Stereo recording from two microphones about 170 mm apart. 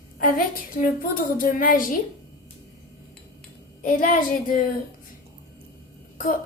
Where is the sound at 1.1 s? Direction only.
55° left (ahead or behind).